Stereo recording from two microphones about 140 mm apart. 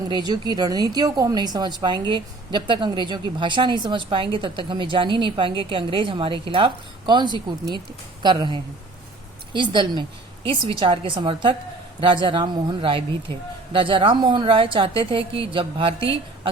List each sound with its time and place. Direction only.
0.1 s a woman's voice: 30° right (ahead or behind)